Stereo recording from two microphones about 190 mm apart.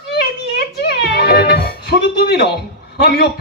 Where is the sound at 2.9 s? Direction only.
55° left (ahead or behind).